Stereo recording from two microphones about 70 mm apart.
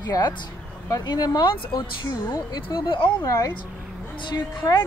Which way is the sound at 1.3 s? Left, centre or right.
Left.